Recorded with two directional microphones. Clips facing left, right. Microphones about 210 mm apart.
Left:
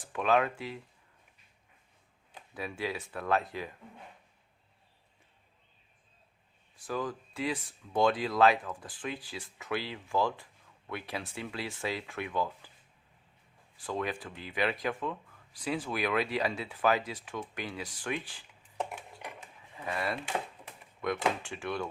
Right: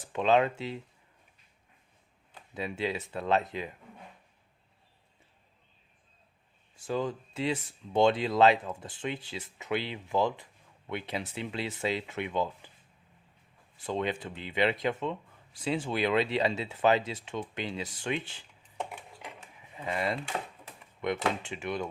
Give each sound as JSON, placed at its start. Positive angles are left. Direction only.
{"t": 0.0, "sound": "speech", "side_deg": -25}
{"t": 2.6, "sound": "speech", "side_deg": -25}
{"t": 6.7, "sound": "speech", "side_deg": -25}
{"t": 13.7, "sound": "speech", "side_deg": -25}
{"t": 18.8, "sound": "a sound", "side_deg": 0}
{"t": 19.7, "sound": "speech", "side_deg": -20}